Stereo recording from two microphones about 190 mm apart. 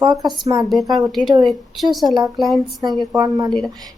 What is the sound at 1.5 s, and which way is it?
Speech, centre (ahead or behind).